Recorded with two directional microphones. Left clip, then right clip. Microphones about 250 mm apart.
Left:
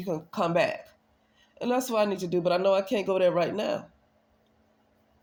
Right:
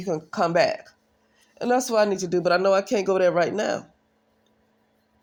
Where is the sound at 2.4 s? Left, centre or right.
Right.